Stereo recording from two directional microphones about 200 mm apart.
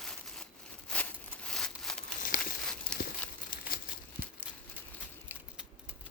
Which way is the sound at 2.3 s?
45° left (ahead or behind).